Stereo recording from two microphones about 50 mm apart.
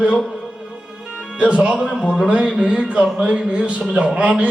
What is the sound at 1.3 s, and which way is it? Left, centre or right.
Speech, right.